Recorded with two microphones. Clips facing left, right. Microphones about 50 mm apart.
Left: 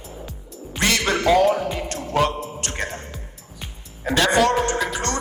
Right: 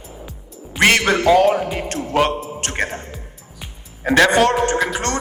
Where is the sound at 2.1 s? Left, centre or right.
Right.